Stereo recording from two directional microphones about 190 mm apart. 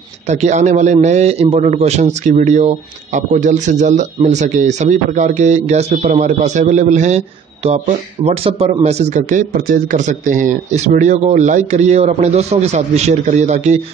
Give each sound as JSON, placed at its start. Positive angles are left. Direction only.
{"t": 0.3, "sound": "a man's voice", "side_deg": -35}